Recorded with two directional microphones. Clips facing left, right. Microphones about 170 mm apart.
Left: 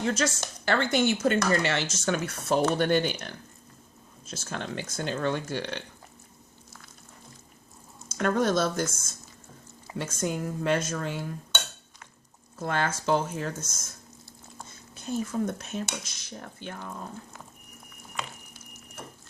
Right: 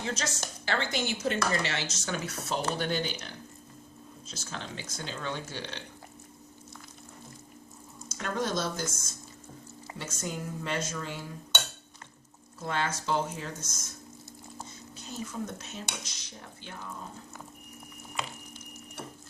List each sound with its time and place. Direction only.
0.0 s speech: 55° left (ahead or behind)
8.1 s speech: 55° left (ahead or behind)
10.0 s speech: 55° left (ahead or behind)
12.5 s speech: 50° left (ahead or behind)
14.9 s speech: 50° left (ahead or behind)